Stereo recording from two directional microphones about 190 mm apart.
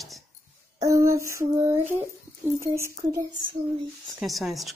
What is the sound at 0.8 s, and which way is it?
Female singing, 15° right (ahead or behind).